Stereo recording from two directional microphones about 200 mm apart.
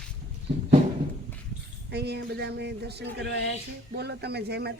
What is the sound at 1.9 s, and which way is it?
A man's voice, 55° right (ahead or behind).